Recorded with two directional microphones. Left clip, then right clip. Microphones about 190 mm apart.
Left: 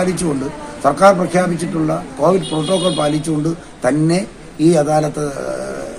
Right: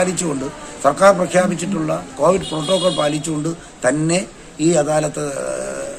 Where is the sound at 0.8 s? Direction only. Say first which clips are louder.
Left 1 dB; 10° right (ahead or behind).